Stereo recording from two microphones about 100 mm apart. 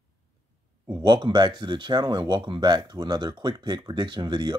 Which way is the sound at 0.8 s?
50° right (ahead or behind).